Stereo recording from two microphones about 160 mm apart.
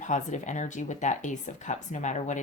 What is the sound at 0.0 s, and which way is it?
Speech, 50° left (ahead or behind).